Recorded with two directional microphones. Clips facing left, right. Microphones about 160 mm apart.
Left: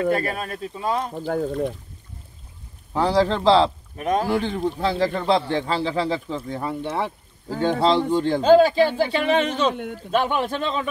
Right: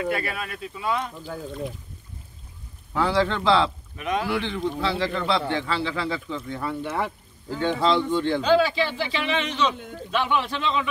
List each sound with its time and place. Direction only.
0.0 s speech: 40° left (ahead or behind)
2.9 s speech: 35° left (ahead or behind)
6.6 s speech: 25° left (ahead or behind)
7.0 s speech: 35° left (ahead or behind)